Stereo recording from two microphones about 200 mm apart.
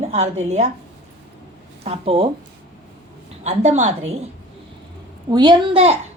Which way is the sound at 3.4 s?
35° right (ahead or behind).